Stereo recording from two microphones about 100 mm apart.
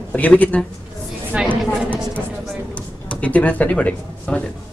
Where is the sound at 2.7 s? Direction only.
15° left (ahead or behind).